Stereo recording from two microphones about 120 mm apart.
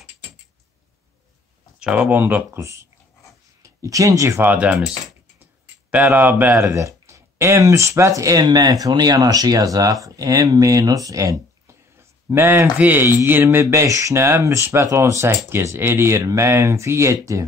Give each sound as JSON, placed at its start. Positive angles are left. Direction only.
{"t": 1.8, "sound": "speech", "side_deg": -10}
{"t": 4.5, "sound": "speech", "side_deg": -15}
{"t": 5.9, "sound": "speech", "side_deg": -10}
{"t": 6.6, "sound": "speech", "side_deg": -25}